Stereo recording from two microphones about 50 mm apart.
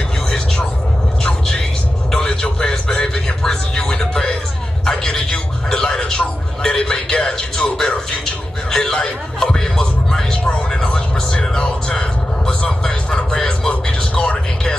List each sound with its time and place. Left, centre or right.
2.0 s music: centre
4.8 s a sound: centre
13.5 s music: centre